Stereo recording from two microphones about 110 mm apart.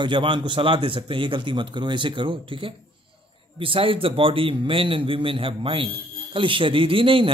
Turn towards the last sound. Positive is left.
turn(degrees=-50)  # may be behind; listen again after turning